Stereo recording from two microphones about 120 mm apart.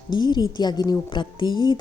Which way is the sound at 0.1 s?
35° left (ahead or behind).